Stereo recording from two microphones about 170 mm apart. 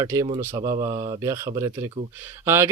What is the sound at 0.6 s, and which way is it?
Speech, 30° right (ahead or behind).